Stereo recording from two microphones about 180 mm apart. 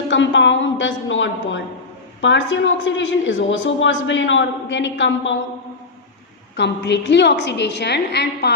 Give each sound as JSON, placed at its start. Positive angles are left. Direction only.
{"t": 0.1, "sound": "a woman's voice", "side_deg": 90}
{"t": 6.6, "sound": "a woman's voice", "side_deg": 75}